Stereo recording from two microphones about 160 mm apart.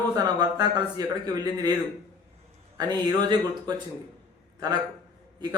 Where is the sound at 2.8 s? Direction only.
25° right (ahead or behind).